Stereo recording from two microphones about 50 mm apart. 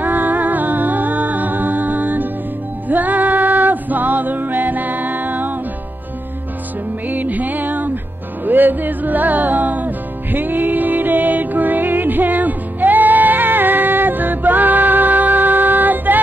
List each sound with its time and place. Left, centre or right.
0.0 s music: right
7.1 s music: right